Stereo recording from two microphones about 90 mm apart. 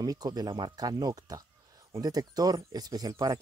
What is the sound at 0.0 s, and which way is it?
Speech, 45° right (ahead or behind).